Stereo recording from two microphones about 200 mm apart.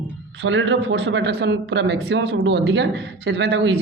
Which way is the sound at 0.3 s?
65° right (ahead or behind).